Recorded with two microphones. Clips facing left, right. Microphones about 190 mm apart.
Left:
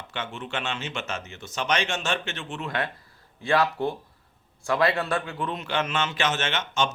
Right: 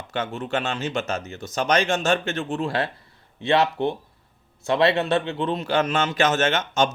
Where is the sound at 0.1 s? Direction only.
40° right (ahead or behind).